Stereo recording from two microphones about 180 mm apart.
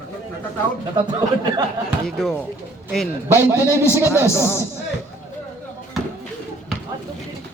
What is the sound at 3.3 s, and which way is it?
Speech, 15° right (ahead or behind).